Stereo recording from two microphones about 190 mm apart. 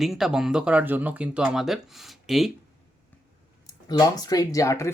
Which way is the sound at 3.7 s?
20° left (ahead or behind).